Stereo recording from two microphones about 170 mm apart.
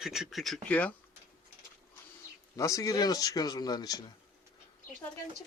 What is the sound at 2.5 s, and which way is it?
Speech, 20° left (ahead or behind).